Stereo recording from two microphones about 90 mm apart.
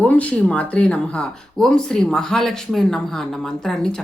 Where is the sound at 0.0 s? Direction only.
15° left (ahead or behind).